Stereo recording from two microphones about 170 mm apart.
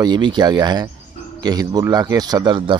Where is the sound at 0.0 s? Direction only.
25° right (ahead or behind).